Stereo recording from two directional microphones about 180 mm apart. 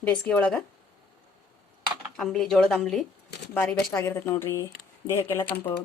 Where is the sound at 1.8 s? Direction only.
Centre (ahead or behind).